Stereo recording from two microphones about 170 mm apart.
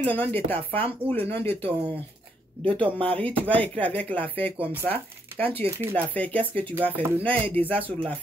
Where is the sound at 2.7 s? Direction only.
30° right (ahead or behind).